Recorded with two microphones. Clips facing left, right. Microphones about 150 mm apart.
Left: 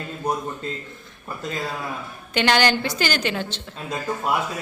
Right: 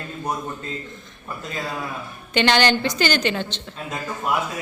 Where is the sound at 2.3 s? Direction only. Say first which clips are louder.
Right 1 dB; 5° left (ahead or behind).